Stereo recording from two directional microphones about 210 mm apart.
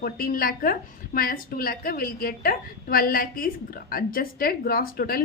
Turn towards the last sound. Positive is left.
turn(degrees=45)  # may be behind; listen again after turning